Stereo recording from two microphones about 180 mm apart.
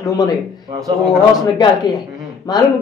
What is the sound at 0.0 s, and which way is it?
Speech, 20° left (ahead or behind).